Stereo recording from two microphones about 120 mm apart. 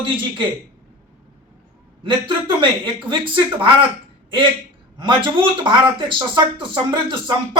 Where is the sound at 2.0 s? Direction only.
45° right (ahead or behind).